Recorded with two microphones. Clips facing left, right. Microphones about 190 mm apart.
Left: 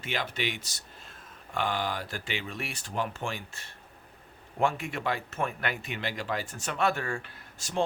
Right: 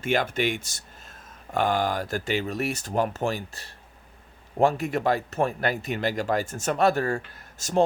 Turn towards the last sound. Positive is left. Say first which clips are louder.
# right 8 dB
turn(degrees=-40)  # may be behind; listen again after turning